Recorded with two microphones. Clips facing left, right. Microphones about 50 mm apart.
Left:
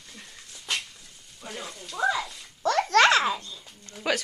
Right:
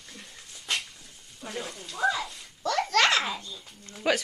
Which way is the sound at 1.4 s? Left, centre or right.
Centre.